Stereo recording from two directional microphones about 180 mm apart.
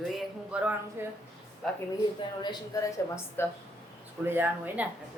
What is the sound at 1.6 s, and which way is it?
Speech, centre (ahead or behind).